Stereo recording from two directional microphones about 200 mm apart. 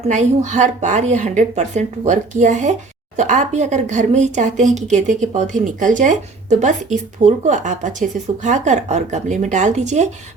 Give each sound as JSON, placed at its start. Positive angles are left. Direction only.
{"t": 0.1, "sound": "speech", "side_deg": -35}